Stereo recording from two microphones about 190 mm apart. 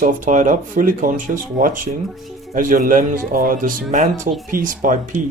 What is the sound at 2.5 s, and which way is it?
Speech, 45° right (ahead or behind).